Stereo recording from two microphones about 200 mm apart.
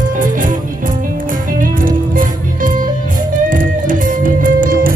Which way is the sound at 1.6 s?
40° right (ahead or behind).